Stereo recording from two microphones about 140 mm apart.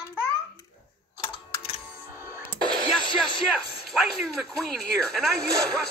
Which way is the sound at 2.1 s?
20° right (ahead or behind).